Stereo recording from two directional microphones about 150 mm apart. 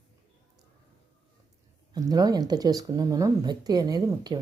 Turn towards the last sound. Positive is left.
turn(degrees=-25)  # may be behind; listen again after turning